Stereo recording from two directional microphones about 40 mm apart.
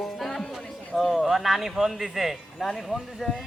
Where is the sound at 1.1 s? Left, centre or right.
Centre.